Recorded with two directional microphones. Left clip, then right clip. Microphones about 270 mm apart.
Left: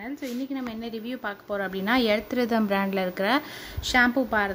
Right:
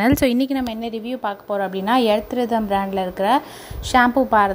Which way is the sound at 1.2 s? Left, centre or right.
Centre.